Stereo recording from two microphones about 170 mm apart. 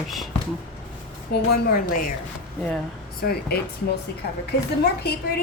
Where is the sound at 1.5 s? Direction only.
65° left (ahead or behind).